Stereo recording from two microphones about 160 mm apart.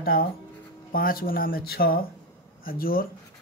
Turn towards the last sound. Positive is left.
turn(degrees=65)  # may be behind; listen again after turning